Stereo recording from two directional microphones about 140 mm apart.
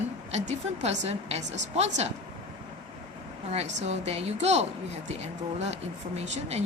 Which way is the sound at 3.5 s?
50° right (ahead or behind).